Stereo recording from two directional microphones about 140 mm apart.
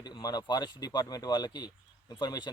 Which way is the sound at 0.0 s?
30° left (ahead or behind).